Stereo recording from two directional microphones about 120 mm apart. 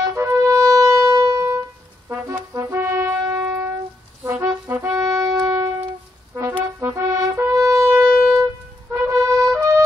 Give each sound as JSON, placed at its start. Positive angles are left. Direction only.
{"t": 0.0, "sound": "wind instrument", "side_deg": -25}
{"t": 2.0, "sound": "brass instrument", "side_deg": -20}
{"t": 6.8, "sound": "shofar", "side_deg": -25}
{"t": 8.9, "sound": "music", "side_deg": -25}